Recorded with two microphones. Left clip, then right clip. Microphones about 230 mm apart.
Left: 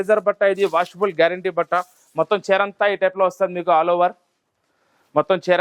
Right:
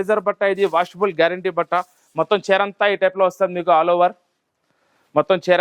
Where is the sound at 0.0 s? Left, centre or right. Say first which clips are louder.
Left 1 dB; left.